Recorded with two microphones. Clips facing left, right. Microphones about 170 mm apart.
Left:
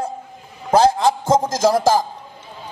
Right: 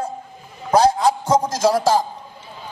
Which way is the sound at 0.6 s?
25° left (ahead or behind).